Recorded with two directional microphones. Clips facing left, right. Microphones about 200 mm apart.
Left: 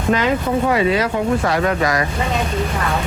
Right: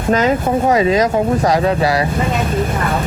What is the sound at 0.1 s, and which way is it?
Speech, 40° right (ahead or behind).